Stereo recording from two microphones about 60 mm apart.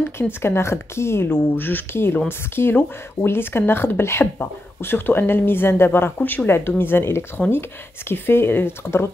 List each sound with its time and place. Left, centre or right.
0.0 s speech: left